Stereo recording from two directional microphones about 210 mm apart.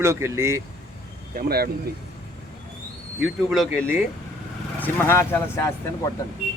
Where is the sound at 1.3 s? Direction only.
45° right (ahead or behind).